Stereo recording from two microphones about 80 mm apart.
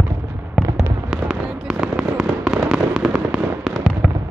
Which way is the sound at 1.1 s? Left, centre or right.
Centre.